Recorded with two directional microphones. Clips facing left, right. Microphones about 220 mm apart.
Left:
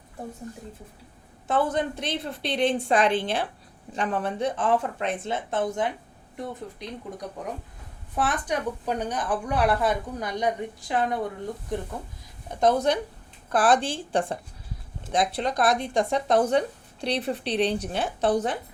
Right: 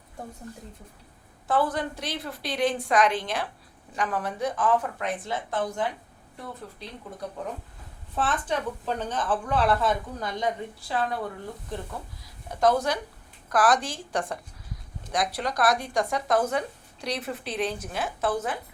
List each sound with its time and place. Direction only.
1.5 s a woman's voice: 25° left (ahead or behind)
12.5 s speech: 20° left (ahead or behind)